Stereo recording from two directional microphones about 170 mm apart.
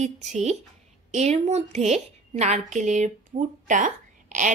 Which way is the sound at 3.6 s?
50° right (ahead or behind).